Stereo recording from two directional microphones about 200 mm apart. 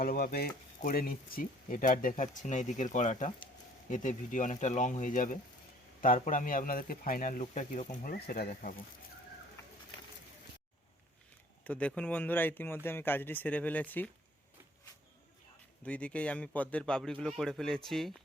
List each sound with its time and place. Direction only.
0.0 s speech: 45° left (ahead or behind)
11.6 s speech: 5° left (ahead or behind)
15.8 s speech: 5° left (ahead or behind)